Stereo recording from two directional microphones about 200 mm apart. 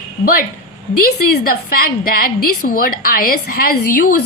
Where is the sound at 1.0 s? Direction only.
50° left (ahead or behind).